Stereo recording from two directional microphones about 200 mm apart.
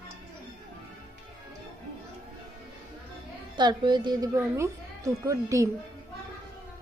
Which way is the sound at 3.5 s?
20° right (ahead or behind).